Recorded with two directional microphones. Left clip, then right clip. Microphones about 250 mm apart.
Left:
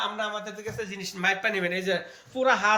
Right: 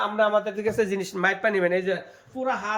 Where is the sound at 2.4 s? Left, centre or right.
Centre.